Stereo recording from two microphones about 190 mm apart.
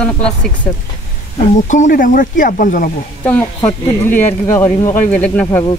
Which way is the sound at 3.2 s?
10° left (ahead or behind).